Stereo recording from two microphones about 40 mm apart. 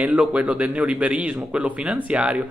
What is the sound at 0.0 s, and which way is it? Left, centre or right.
Speech, right.